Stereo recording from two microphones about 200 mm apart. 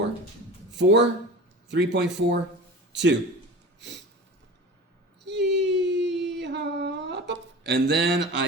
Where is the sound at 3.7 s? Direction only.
60° right (ahead or behind).